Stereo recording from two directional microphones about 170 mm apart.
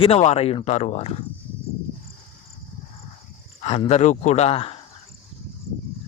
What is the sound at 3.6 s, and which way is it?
Speech, 40° left (ahead or behind).